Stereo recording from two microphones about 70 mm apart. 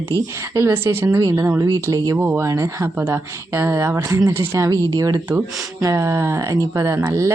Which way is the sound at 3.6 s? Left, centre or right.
Right.